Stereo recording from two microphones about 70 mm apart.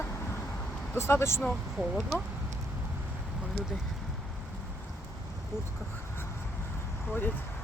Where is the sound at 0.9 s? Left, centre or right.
Left.